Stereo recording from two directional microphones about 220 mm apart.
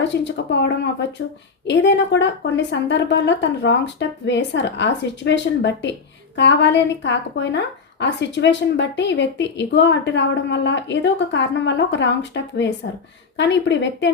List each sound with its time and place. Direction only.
0.0 s a woman's voice: 55° left (ahead or behind)